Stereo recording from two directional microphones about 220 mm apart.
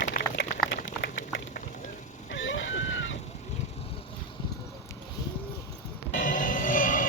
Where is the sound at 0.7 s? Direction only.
50° left (ahead or behind).